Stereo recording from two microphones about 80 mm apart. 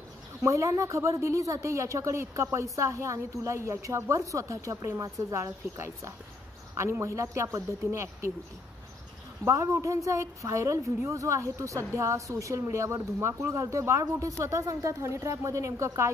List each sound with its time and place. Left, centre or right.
0.4 s speech: right
9.4 s speech: right